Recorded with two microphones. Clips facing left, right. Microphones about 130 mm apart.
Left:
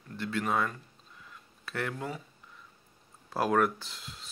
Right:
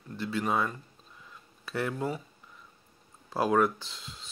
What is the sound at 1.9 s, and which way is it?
Speech, 25° right (ahead or behind).